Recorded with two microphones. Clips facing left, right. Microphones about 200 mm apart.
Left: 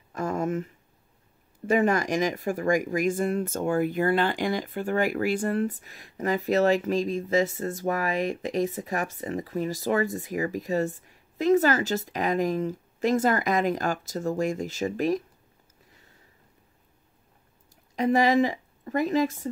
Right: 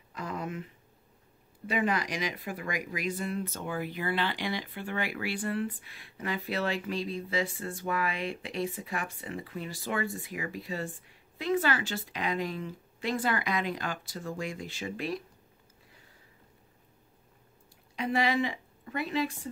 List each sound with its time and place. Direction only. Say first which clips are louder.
0.1 s a sound: left 9 dB; 45° left (ahead or behind)
1.7 s speech: left 7 dB; 45° left (ahead or behind)
17.9 s a woman's voice: left 7 dB; 40° left (ahead or behind)